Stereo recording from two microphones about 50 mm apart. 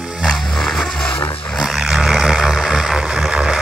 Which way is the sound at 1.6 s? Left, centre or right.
Centre.